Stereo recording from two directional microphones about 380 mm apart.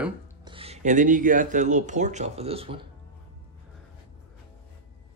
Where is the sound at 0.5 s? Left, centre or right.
Centre.